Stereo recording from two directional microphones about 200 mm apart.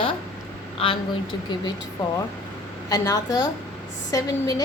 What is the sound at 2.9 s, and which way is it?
A woman's voice, 15° left (ahead or behind).